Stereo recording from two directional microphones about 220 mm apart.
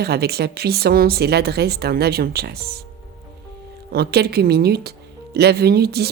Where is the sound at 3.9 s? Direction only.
45° right (ahead or behind).